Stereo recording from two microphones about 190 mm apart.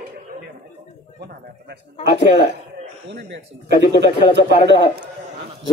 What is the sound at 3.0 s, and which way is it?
Speech, 65° right (ahead or behind).